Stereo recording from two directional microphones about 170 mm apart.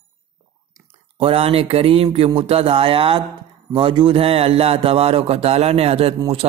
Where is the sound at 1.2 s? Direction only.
35° right (ahead or behind).